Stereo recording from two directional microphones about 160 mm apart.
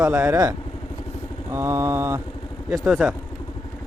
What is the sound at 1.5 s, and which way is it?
Mantra, 15° right (ahead or behind).